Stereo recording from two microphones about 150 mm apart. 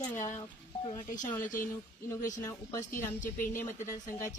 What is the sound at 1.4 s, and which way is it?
Speech, 65° left (ahead or behind).